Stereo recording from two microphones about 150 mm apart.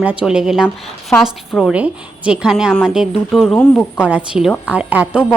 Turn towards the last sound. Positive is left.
turn(degrees=-5)  # may be behind; listen again after turning